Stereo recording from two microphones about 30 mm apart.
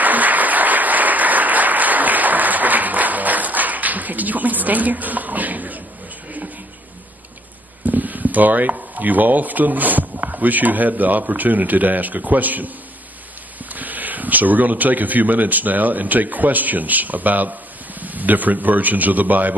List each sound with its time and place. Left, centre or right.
0.0 s applause: right
7.8 s speech: right
13.7 s speech: right